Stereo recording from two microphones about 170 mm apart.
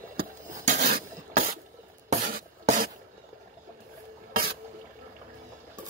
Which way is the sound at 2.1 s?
50° right (ahead or behind).